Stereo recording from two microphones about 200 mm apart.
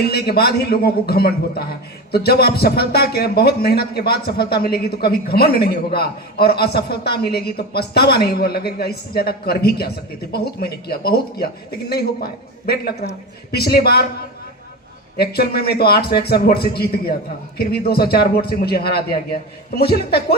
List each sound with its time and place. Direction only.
0.0 s a man's voice: 55° left (ahead or behind)
15.2 s a man's voice: 50° left (ahead or behind)